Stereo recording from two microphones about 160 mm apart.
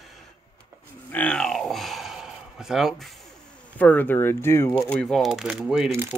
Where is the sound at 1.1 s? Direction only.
5° left (ahead or behind).